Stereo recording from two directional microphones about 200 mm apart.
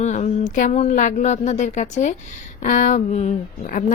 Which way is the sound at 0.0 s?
35° left (ahead or behind).